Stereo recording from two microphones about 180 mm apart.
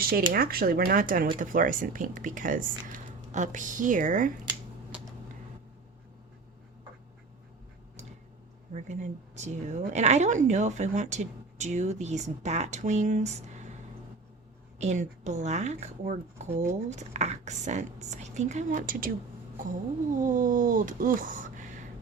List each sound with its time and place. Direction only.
0.0 s speech: 55° right (ahead or behind)
8.7 s a woman's voice: 40° right (ahead or behind)
14.8 s a woman's voice: 40° right (ahead or behind)
20.1 s speech: 45° right (ahead or behind)